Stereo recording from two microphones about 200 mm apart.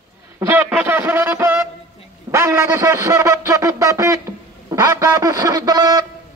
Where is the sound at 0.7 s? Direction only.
10° right (ahead or behind).